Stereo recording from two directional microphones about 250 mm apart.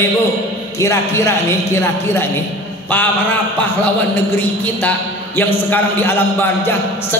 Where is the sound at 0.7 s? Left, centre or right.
Centre.